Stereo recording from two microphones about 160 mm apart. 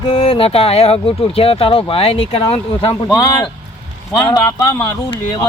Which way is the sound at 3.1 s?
25° left (ahead or behind).